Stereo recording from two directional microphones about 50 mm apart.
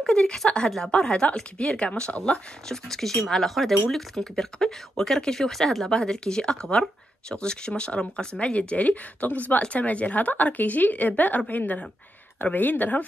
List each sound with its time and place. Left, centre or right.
0.0 s a sound: centre
0.7 s speech: centre
2.7 s speech: centre; by 13.0 s left